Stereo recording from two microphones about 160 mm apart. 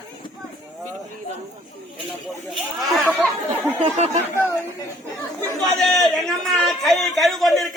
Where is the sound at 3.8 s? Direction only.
40° right (ahead or behind).